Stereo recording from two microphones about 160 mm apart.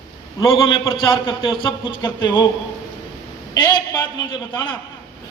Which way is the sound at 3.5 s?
25° left (ahead or behind).